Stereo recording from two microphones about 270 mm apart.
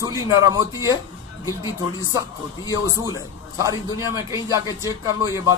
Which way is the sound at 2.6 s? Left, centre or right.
Centre.